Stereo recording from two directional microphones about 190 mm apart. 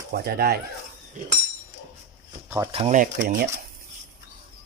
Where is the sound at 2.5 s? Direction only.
15° right (ahead or behind).